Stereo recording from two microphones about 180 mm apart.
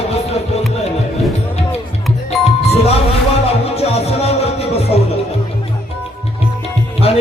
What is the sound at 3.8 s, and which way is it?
Music, 35° left (ahead or behind).